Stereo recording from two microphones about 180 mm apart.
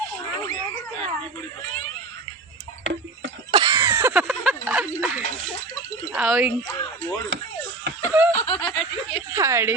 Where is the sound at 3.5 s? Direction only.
20° right (ahead or behind).